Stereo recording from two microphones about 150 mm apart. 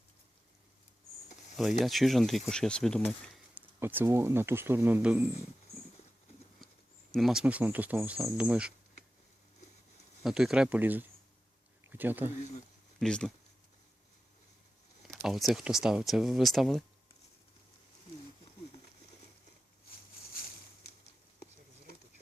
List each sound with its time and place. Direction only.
1.8 s speech: centre (ahead or behind)
3.5 s speech: 15° right (ahead or behind)
7.1 s speech: centre (ahead or behind)
10.2 s speech: 5° right (ahead or behind)
13.0 s speech: 5° left (ahead or behind)
15.0 s speech: centre (ahead or behind)